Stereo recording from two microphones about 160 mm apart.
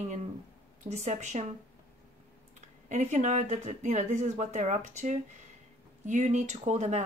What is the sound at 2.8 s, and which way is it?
A woman's voice, 45° right (ahead or behind).